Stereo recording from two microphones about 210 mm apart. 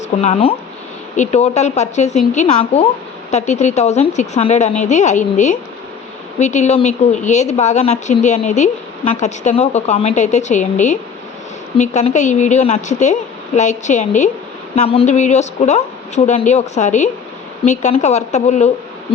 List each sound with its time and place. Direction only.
0.2 s a woman's voice: 30° left (ahead or behind)